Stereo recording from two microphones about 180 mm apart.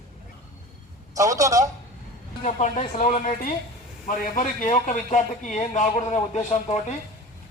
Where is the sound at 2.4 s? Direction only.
40° left (ahead or behind).